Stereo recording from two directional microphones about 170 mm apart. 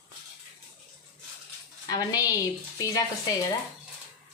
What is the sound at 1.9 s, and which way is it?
Speech, 20° left (ahead or behind).